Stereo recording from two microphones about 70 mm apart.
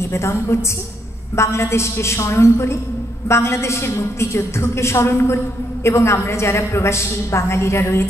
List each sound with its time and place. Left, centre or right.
0.0 s a woman's voice: left